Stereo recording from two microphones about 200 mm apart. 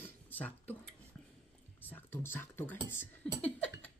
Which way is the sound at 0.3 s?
10° left (ahead or behind).